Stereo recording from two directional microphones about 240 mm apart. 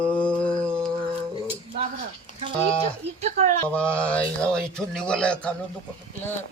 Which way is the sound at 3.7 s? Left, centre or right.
Centre.